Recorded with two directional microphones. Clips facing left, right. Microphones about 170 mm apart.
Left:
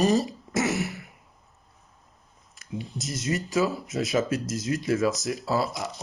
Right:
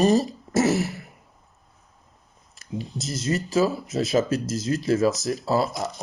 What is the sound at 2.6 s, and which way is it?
Speech, 35° right (ahead or behind).